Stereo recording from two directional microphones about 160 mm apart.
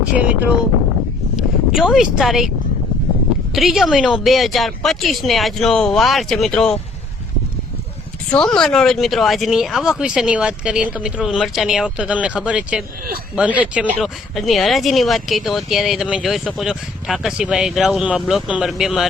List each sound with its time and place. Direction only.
0.2 s speech: 10° right (ahead or behind)
3.5 s speech: centre (ahead or behind)
8.3 s speech: 5° left (ahead or behind)